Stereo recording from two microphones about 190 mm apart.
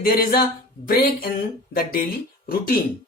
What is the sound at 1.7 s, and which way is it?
Speech, 50° left (ahead or behind).